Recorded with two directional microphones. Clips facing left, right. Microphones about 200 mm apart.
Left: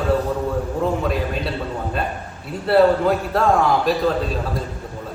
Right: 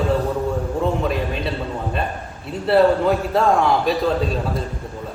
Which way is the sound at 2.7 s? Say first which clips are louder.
Even; centre (ahead or behind).